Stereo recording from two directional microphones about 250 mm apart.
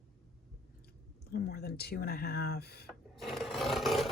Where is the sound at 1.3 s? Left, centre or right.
Left.